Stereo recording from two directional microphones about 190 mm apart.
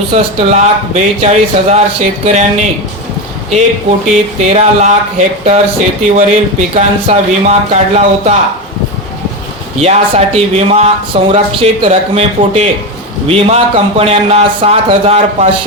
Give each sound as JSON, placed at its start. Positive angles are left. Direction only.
{"t": 0.1, "sound": "speech", "side_deg": -35}
{"t": 4.4, "sound": "speech", "side_deg": -35}
{"t": 9.8, "sound": "speech", "side_deg": -35}